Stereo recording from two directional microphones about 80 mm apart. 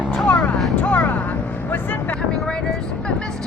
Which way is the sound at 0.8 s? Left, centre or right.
Centre.